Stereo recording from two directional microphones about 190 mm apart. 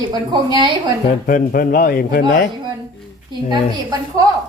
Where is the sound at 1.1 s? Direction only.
45° left (ahead or behind).